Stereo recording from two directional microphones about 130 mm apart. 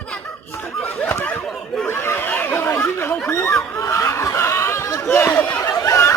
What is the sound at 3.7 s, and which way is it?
Snicker, 25° left (ahead or behind).